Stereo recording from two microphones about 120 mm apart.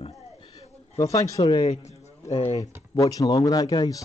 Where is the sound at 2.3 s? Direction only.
55° left (ahead or behind).